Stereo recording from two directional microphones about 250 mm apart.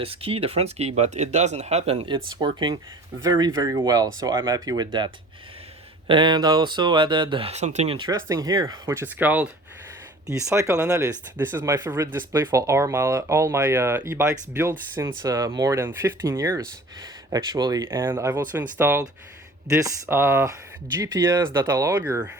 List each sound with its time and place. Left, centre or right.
0.0 s speech: right